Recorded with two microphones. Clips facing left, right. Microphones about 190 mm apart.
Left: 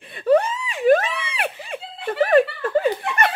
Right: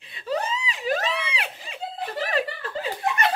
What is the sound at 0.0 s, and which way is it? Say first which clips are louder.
Wail: left 11 dB; 55° left (ahead or behind).